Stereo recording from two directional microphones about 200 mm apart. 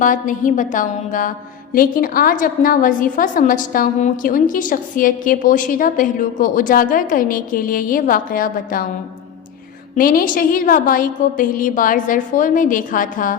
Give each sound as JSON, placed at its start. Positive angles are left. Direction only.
{"t": 0.0, "sound": "a woman's voice", "side_deg": 40}
{"t": 9.9, "sound": "a woman's voice", "side_deg": 45}